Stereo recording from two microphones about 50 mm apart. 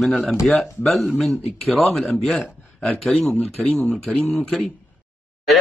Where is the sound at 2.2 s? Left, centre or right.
Centre.